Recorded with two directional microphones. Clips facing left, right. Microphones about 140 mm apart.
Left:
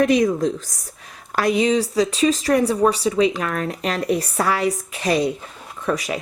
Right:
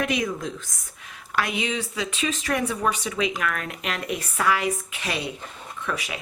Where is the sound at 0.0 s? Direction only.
40° left (ahead or behind).